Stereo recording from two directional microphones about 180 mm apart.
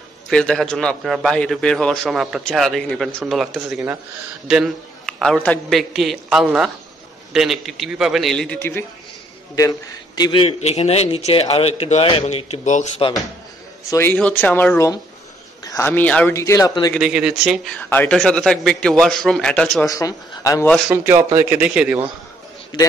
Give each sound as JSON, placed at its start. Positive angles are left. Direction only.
{"t": 0.3, "sound": "a man's voice", "side_deg": 5}
{"t": 9.6, "sound": "a man's voice", "side_deg": 20}
{"t": 13.8, "sound": "a man's voice", "side_deg": 15}
{"t": 17.0, "sound": "a man's voice", "side_deg": -5}
{"t": 19.9, "sound": "speech", "side_deg": 20}
{"t": 20.9, "sound": "speech", "side_deg": -15}